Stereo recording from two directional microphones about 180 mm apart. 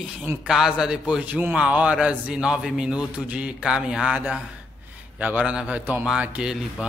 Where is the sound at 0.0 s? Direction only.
10° right (ahead or behind).